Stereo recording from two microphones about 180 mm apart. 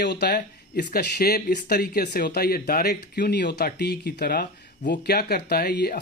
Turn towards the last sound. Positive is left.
turn(degrees=65)  # may be behind; listen again after turning